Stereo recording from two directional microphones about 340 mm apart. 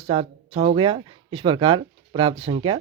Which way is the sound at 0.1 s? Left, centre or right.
Centre.